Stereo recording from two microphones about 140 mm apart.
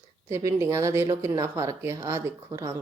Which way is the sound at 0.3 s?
20° right (ahead or behind).